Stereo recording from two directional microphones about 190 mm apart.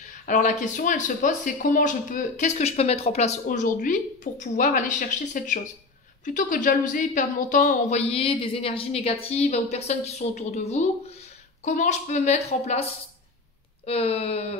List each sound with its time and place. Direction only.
0.0 s speech: 40° left (ahead or behind)